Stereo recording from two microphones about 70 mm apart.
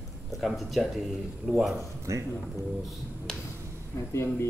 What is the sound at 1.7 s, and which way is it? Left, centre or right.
Speech, right.